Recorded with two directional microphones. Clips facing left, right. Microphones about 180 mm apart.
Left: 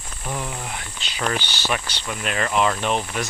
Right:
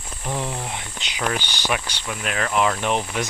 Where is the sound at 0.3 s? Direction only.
25° right (ahead or behind); by 2.7 s centre (ahead or behind).